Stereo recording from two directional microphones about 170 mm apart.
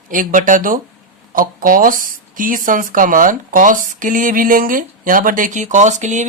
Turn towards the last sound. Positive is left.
turn(degrees=-45)  # may be behind; listen again after turning